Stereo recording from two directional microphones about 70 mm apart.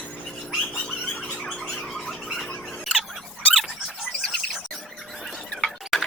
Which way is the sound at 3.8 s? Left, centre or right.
Centre.